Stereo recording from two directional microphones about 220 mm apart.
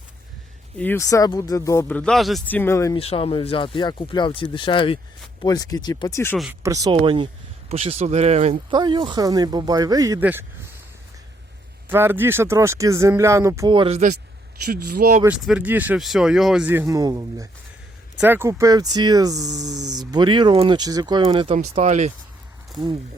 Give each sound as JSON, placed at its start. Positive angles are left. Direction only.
{"t": 0.8, "sound": "speech", "side_deg": 10}
{"t": 3.0, "sound": "speech", "side_deg": 25}
{"t": 6.3, "sound": "speech", "side_deg": 0}
{"t": 6.6, "sound": "speech", "side_deg": -15}
{"t": 11.9, "sound": "speech", "side_deg": -10}
{"t": 14.6, "sound": "speech", "side_deg": -40}
{"t": 15.2, "sound": "speech", "side_deg": -5}
{"t": 22.8, "sound": "speech", "side_deg": -20}